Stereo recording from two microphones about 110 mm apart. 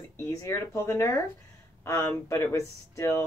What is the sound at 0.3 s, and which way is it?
Speech, 25° left (ahead or behind).